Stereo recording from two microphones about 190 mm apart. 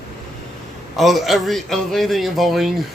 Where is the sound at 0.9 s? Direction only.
Centre (ahead or behind).